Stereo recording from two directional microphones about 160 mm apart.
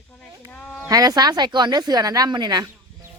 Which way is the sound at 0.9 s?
25° right (ahead or behind).